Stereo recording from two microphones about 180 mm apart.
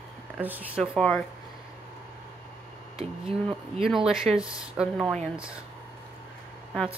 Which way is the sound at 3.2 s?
30° right (ahead or behind).